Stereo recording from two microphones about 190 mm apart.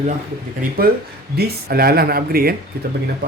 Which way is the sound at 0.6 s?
50° right (ahead or behind).